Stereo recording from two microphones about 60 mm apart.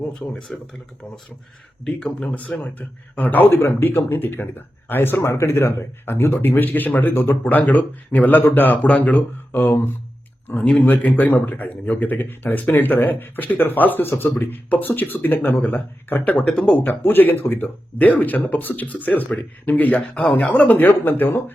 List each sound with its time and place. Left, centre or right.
0.1 s speech: centre
9.5 s speech: left
10.6 s speech: centre
10.8 s speech: left
16.5 s speech: centre
16.7 s speech: left